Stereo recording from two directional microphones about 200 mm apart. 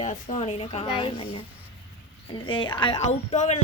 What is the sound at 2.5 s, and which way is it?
Speech, 25° left (ahead or behind).